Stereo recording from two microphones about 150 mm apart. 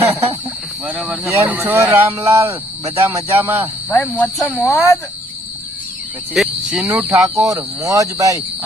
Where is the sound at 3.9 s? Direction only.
10° left (ahead or behind).